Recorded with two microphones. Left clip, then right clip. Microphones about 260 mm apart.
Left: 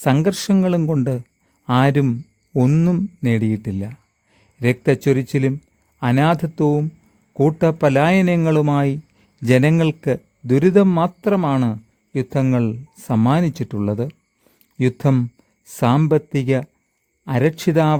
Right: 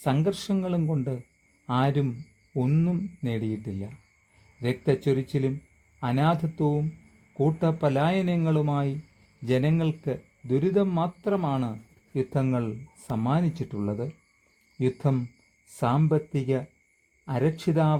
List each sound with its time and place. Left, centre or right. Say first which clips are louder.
0.0 s a man's voice: left 8 dB; left